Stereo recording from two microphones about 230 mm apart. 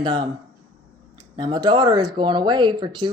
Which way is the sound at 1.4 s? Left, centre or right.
Centre.